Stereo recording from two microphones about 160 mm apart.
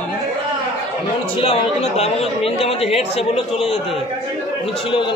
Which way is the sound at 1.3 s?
40° left (ahead or behind).